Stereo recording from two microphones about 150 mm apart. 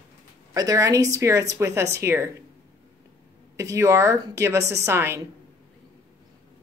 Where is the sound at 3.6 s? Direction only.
20° right (ahead or behind).